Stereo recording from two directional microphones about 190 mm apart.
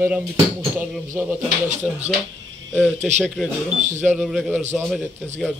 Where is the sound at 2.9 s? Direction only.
35° right (ahead or behind).